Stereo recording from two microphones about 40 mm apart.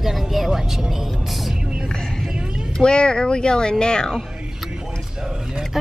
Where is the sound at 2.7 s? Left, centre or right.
Left.